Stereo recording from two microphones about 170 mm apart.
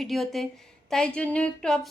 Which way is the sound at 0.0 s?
Centre (ahead or behind).